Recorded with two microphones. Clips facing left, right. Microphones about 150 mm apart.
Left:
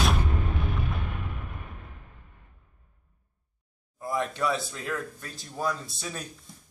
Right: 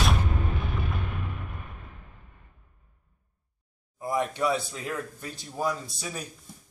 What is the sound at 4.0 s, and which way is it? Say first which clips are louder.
Speech: right 2 dB; 15° right (ahead or behind).